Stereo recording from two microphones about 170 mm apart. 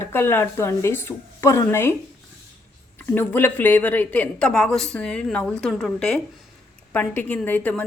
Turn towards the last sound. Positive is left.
turn(degrees=10)  # may be behind; listen again after turning